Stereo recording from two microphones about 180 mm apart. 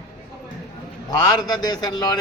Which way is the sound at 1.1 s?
20° left (ahead or behind).